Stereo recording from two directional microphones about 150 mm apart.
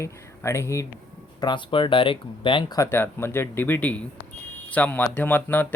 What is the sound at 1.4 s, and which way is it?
Speech, 30° left (ahead or behind).